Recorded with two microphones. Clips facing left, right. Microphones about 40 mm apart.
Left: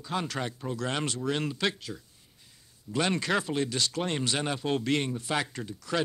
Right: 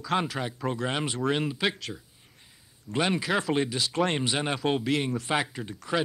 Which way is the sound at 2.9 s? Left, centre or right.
Centre.